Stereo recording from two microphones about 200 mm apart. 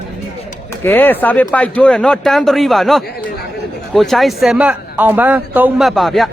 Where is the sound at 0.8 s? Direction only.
10° left (ahead or behind).